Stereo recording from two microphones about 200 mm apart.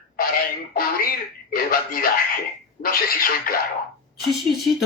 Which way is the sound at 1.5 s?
45° left (ahead or behind).